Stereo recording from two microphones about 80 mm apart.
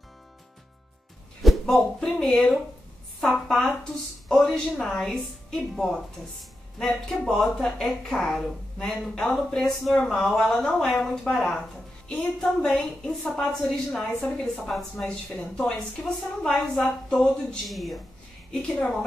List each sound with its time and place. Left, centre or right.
1.4 s speech: centre
12.1 s speech: centre
12.6 s speech: centre